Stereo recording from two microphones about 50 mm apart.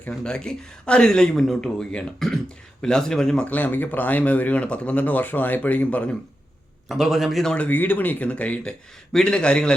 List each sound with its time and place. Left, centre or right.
0.1 s speech: centre
3.4 s speech: left
6.8 s a man's voice: centre
7.7 s speech: left; by 9.7 s centre